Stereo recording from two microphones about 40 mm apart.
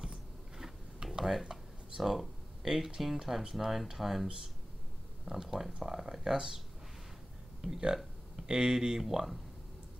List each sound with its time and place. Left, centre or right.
0.0 s gears: centre
1.5 s a sound: centre
3.0 s speech: centre
7.6 s speech: centre
9.0 s speech: centre